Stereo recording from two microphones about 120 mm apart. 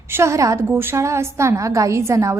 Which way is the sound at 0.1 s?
25° right (ahead or behind).